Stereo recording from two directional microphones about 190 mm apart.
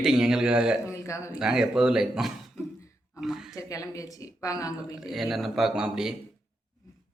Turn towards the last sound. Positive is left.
turn(degrees=-5)  # may be behind; listen again after turning